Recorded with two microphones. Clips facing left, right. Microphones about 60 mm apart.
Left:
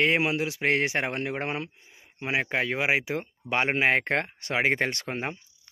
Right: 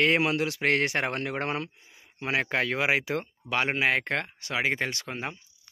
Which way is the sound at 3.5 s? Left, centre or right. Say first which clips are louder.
Left 2 dB; left.